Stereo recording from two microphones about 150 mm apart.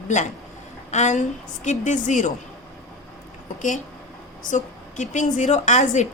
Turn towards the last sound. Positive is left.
turn(degrees=50)  # may be behind; listen again after turning